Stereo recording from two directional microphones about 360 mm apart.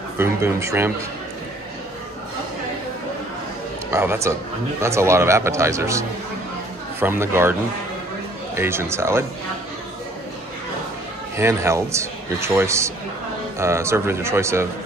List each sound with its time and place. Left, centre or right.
0.2 s a man's voice: centre
3.9 s a man's voice: centre
8.5 s a man's voice: centre
11.3 s a man's voice: centre